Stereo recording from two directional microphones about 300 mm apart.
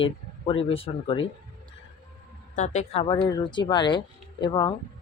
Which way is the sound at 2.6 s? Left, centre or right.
Left.